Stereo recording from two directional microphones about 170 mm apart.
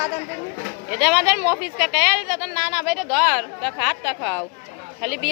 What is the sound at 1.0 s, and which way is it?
A woman's voice, 10° right (ahead or behind).